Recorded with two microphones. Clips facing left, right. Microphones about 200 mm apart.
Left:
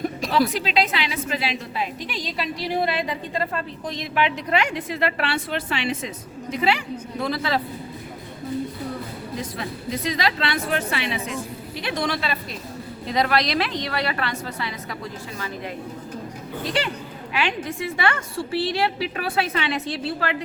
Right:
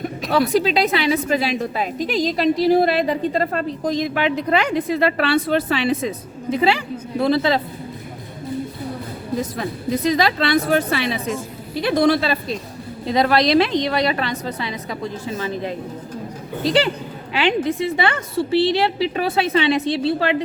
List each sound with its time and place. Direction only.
0.5 s a woman's voice: 40° right (ahead or behind)
9.4 s a woman's voice: 40° right (ahead or behind); by 20.3 s 25° right (ahead or behind)